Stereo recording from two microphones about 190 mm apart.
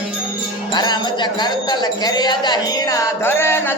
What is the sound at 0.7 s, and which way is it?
Speech, 25° left (ahead or behind).